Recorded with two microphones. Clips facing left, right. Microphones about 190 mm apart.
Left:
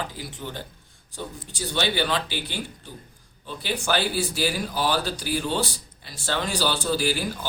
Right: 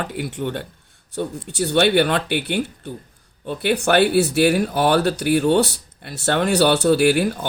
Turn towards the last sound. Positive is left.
turn(degrees=-60)  # may be behind; listen again after turning